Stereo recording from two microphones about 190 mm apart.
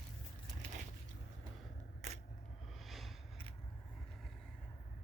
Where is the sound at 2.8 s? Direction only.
Centre (ahead or behind).